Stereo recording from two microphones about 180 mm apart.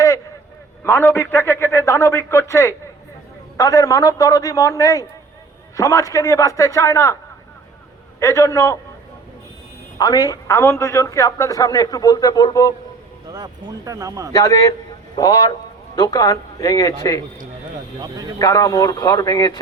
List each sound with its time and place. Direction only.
0.9 s a man's voice: 10° left (ahead or behind)
8.2 s a man's voice: 15° left (ahead or behind)
10.0 s a man's voice: 20° left (ahead or behind)
13.3 s speech: 20° right (ahead or behind)
14.3 s a man's voice: 15° left (ahead or behind)
18.3 s a man's voice: 20° left (ahead or behind)